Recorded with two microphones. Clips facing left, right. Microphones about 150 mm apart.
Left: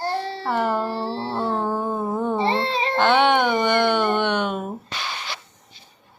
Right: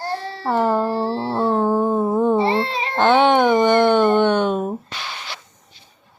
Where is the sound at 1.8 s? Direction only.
35° right (ahead or behind).